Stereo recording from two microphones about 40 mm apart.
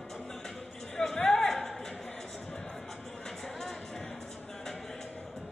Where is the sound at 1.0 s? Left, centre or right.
Centre.